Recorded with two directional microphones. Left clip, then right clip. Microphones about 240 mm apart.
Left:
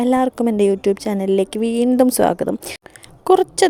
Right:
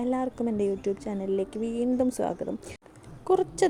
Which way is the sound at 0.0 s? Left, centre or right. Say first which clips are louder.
Left 12 dB; left.